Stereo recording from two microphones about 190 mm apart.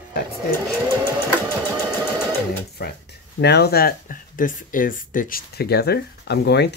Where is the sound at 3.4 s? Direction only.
60° left (ahead or behind).